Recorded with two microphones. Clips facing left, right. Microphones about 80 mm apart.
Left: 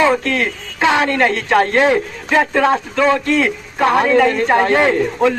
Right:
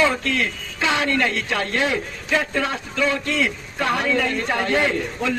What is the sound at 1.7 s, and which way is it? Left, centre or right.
Speech, left.